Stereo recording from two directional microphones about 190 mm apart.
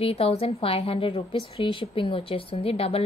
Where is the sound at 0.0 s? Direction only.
30° left (ahead or behind).